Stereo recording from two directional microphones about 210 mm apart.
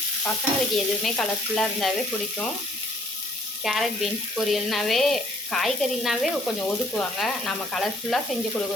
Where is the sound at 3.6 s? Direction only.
Centre (ahead or behind).